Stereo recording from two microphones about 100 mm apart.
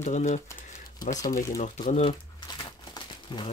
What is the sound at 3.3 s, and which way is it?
Speech, 50° left (ahead or behind).